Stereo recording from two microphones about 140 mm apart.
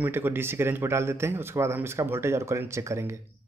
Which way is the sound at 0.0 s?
15° right (ahead or behind).